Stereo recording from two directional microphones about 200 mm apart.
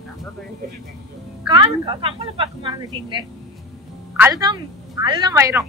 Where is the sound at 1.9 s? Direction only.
25° right (ahead or behind).